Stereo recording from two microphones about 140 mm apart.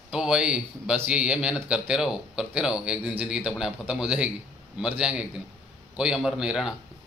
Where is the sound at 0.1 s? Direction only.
5° right (ahead or behind).